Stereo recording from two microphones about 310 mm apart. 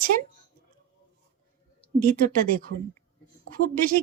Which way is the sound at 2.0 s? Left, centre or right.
Right.